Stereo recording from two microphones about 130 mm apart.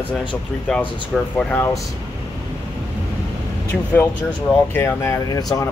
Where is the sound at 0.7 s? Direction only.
5° left (ahead or behind).